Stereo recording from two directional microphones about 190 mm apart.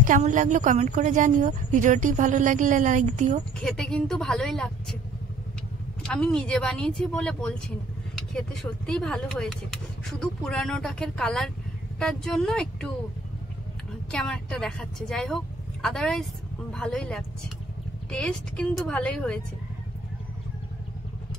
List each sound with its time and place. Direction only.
0.0 s a woman's voice: 45° right (ahead or behind)
3.6 s speech: 5° left (ahead or behind)
6.0 s speech: 5° left (ahead or behind)
14.1 s speech: 5° left (ahead or behind)